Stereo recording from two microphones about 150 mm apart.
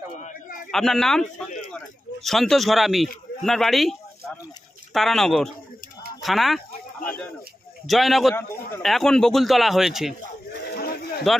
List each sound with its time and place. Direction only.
0.2 s a sound: 60° left (ahead or behind)
0.7 s a man's voice: centre (ahead or behind)
2.2 s a man's voice: centre (ahead or behind)
7.8 s a man's voice: centre (ahead or behind)
10.7 s livestock: 90° left